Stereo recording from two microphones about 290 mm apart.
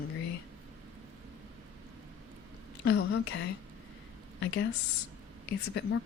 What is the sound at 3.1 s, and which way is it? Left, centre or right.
Speech, left.